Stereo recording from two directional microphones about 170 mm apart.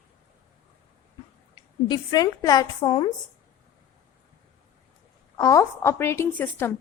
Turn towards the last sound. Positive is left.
turn(degrees=10)  # may be behind; listen again after turning